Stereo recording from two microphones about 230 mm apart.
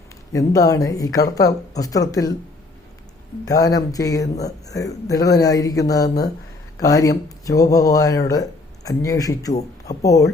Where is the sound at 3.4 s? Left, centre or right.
Centre.